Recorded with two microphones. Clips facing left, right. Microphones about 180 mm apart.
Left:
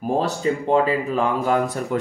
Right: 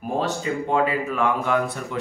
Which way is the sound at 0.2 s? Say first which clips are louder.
Left 3 dB; 35° left (ahead or behind).